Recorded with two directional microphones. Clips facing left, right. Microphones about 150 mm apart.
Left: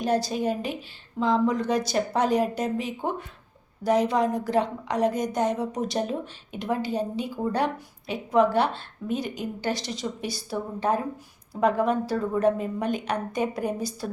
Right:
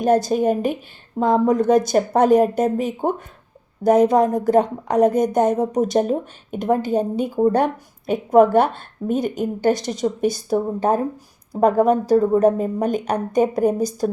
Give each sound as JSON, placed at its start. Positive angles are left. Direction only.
{"t": 0.0, "sound": "a woman's voice", "side_deg": -50}